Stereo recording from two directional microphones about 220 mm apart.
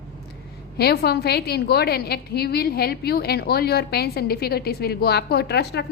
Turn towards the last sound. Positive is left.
turn(degrees=50)  # may be behind; listen again after turning